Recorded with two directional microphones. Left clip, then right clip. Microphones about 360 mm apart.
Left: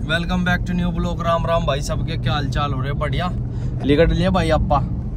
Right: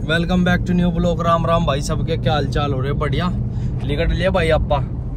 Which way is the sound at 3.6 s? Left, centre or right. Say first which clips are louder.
Left 7 dB; left.